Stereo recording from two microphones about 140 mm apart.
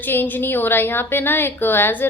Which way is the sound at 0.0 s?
15° left (ahead or behind).